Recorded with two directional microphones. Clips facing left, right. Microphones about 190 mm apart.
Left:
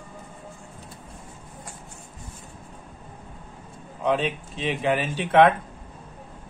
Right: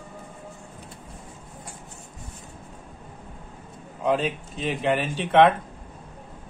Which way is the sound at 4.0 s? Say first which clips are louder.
Even; centre (ahead or behind).